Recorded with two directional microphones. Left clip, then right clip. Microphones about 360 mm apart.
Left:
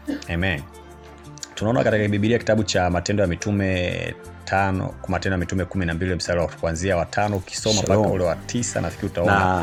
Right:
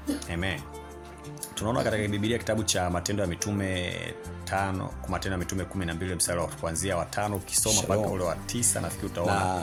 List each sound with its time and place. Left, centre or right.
0.3 s speech: right